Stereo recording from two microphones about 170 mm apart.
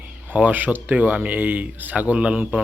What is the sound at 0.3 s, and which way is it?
Speech, 10° right (ahead or behind).